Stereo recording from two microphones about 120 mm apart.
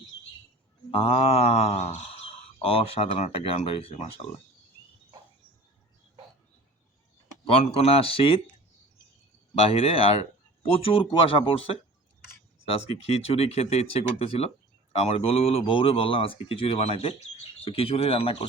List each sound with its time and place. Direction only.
0.9 s speech: 50° left (ahead or behind)
7.4 s speech: 55° left (ahead or behind)
9.6 s speech: 50° left (ahead or behind)